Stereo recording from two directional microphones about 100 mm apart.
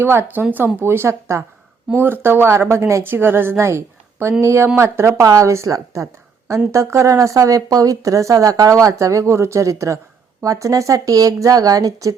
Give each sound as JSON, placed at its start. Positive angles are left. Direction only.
{"t": 0.0, "sound": "speech", "side_deg": -25}